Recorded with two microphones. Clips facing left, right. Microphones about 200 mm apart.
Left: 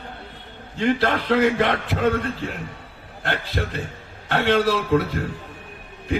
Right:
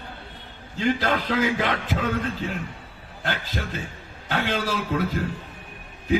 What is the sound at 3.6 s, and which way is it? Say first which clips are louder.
Speech: left 5 dB; 50° left (ahead or behind).